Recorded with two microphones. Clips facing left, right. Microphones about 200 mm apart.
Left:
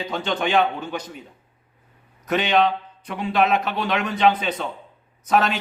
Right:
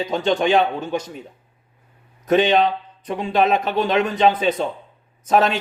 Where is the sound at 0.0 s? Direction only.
45° right (ahead or behind).